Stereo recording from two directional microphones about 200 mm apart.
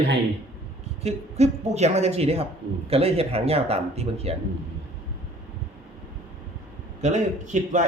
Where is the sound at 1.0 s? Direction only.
30° right (ahead or behind).